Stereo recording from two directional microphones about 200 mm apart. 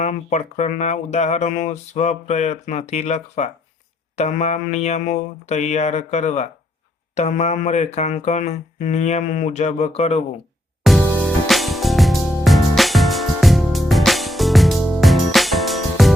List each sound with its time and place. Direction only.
0.0 s speech: 35° left (ahead or behind)
10.8 s music: centre (ahead or behind)